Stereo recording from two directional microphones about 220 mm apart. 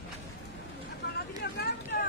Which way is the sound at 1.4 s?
50° left (ahead or behind).